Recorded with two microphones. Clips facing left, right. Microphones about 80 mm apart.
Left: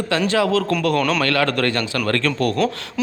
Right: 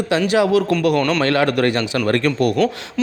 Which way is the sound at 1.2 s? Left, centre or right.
Right.